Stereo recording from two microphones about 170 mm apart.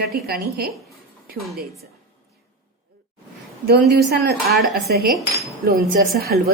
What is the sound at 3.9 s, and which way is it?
Speech, 75° right (ahead or behind).